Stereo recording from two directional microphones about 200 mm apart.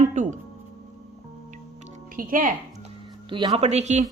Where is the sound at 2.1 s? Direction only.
45° right (ahead or behind).